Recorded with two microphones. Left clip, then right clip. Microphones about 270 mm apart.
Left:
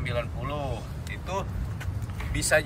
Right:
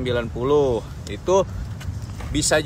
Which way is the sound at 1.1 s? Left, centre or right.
Centre.